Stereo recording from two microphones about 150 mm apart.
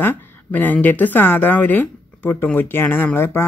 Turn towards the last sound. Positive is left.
turn(degrees=15)  # may be behind; listen again after turning